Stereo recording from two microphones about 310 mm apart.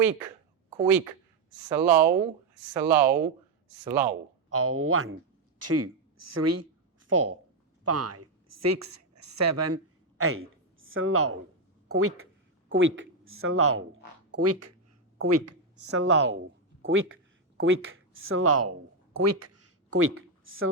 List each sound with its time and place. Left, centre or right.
0.9 s speech: centre
4.4 s a woman's voice: right
15.2 s speech: right
15.9 s speech: right
19.1 s a sound: right